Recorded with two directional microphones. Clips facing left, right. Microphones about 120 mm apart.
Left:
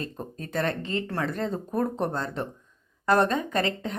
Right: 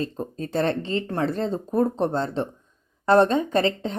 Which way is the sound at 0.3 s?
30° right (ahead or behind).